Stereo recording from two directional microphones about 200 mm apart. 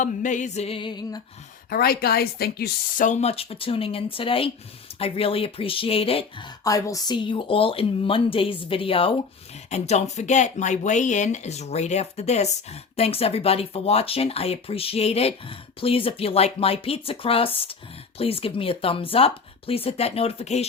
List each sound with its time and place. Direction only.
0.0 s speech: 40° left (ahead or behind); by 1.2 s 20° left (ahead or behind)
1.7 s speech: 50° left (ahead or behind)
3.1 s speech: 30° left (ahead or behind)